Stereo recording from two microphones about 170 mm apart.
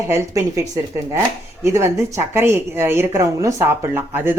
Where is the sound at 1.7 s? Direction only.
15° right (ahead or behind).